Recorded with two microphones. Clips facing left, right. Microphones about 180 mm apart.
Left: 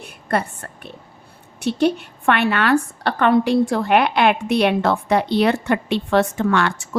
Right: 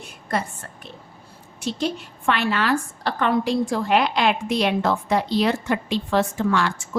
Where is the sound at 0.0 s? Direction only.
60° left (ahead or behind).